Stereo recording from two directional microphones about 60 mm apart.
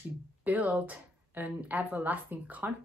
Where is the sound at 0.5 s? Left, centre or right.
Right.